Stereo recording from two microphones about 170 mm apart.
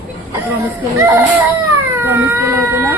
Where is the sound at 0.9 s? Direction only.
20° right (ahead or behind).